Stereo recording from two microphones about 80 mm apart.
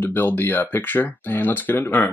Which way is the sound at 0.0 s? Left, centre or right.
Left.